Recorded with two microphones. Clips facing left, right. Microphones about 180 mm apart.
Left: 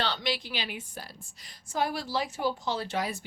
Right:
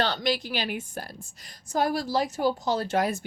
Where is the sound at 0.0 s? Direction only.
45° right (ahead or behind).